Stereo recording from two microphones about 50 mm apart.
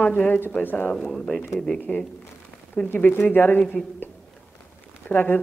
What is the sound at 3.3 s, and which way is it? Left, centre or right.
Speech, left.